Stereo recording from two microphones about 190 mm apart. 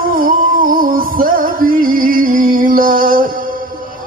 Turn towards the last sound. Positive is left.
turn(degrees=-45)  # may be behind; listen again after turning